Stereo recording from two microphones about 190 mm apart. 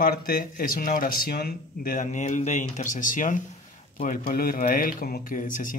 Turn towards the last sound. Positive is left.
turn(degrees=45)  # may be behind; listen again after turning